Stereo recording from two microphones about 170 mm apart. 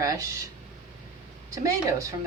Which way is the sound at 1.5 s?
20° right (ahead or behind).